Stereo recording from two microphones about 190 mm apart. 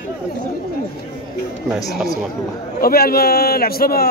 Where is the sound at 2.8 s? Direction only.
55° left (ahead or behind).